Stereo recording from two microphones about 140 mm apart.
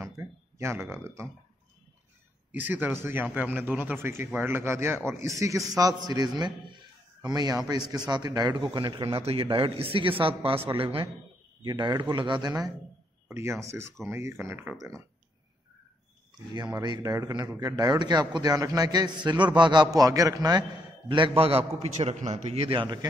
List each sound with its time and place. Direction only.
0.0 s a sound: 20° right (ahead or behind)
2.5 s a man's voice: 10° right (ahead or behind); by 9.2 s 30° right (ahead or behind)
9.2 s a man's voice: 40° right (ahead or behind); by 14.9 s 15° right (ahead or behind)
16.5 s a man's voice: 30° right (ahead or behind)
21.1 s a man's voice: 40° right (ahead or behind)